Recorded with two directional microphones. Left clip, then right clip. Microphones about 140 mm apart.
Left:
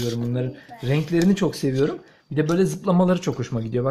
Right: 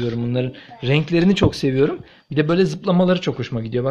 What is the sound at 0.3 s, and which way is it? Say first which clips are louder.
Speech: right 5 dB; 25° right (ahead or behind).